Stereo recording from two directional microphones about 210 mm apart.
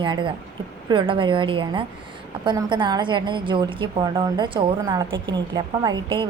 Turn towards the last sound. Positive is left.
turn(degrees=-20)  # may be behind; listen again after turning